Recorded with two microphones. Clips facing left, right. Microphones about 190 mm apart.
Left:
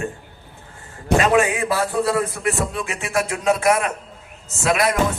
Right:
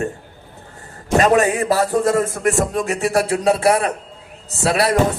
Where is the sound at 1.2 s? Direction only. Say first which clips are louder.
Right 4 dB; 40° right (ahead or behind).